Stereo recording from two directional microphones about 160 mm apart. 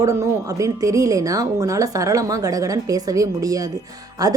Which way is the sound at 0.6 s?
20° right (ahead or behind).